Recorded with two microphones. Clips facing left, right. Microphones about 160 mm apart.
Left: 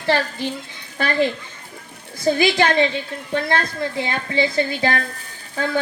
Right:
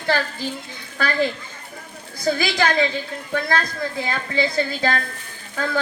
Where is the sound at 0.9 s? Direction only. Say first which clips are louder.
Left 2 dB; 20° left (ahead or behind).